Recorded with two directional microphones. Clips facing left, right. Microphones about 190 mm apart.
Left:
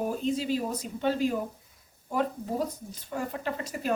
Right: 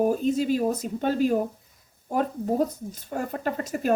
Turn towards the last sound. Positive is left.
turn(degrees=-45)  # may be behind; listen again after turning